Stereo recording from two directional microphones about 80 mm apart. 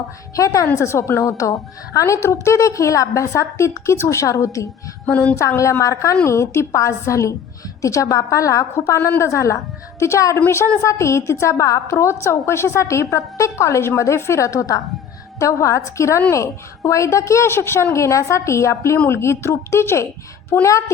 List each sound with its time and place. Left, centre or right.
0.3 s a woman's voice: left
5.0 s a woman's voice: centre
5.3 s a woman's voice: left